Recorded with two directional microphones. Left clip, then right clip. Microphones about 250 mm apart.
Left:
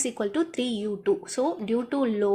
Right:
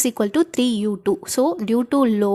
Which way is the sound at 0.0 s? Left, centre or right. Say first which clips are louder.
Right 7 dB; right.